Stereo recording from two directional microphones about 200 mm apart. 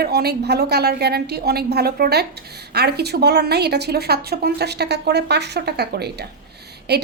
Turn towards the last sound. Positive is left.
turn(degrees=-55)  # may be behind; listen again after turning